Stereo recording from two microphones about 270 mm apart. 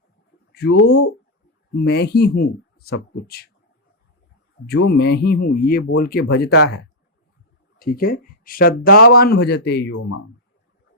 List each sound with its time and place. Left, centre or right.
0.5 s speech: left
4.7 s speech: left
7.8 s speech: left